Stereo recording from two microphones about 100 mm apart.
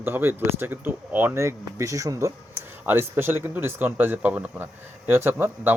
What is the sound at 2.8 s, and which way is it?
Speech, 20° right (ahead or behind).